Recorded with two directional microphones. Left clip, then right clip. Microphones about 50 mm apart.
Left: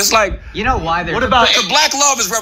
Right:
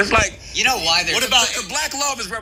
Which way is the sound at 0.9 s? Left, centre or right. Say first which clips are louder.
Left 2 dB; right.